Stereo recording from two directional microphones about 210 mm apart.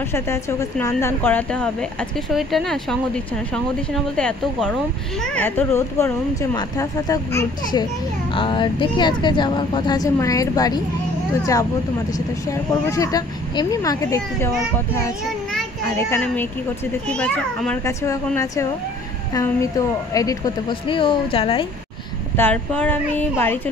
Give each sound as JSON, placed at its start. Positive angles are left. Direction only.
{"t": 0.0, "sound": "a woman's voice", "side_deg": 10}
{"t": 12.1, "sound": "speech", "side_deg": 15}
{"t": 15.8, "sound": "a woman's voice", "side_deg": 15}
{"t": 22.4, "sound": "speech", "side_deg": 5}